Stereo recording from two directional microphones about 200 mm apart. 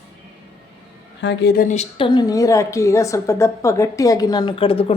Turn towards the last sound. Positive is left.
turn(degrees=30)  # may be behind; listen again after turning